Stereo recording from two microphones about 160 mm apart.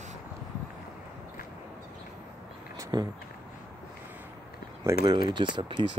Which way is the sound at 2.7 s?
20° right (ahead or behind).